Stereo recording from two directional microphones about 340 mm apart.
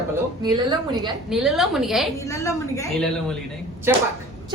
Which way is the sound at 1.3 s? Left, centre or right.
Centre.